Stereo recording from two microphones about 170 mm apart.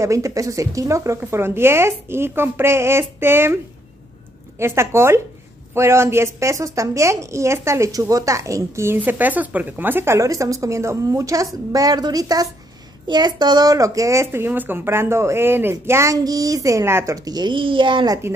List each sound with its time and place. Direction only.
0.0 s a woman's voice: 20° right (ahead or behind)
4.6 s a woman's voice: 15° right (ahead or behind)